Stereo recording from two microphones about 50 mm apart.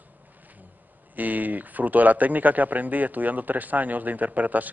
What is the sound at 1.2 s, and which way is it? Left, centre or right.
Speech, right.